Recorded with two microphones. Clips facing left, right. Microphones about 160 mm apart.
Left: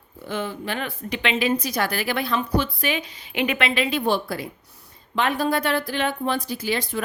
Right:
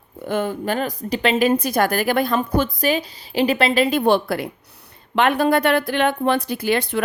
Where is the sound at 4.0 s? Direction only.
65° right (ahead or behind).